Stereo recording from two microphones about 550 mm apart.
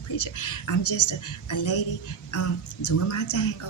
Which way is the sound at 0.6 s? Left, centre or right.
Left.